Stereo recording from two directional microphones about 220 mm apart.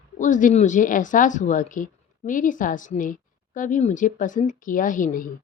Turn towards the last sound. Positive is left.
turn(degrees=35)  # may be behind; listen again after turning